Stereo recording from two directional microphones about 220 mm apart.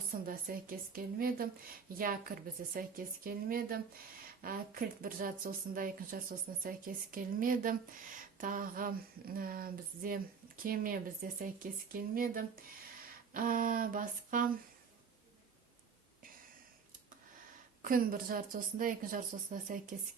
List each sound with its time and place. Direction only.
0.3 s speech: 40° right (ahead or behind)
17.8 s speech: 40° right (ahead or behind)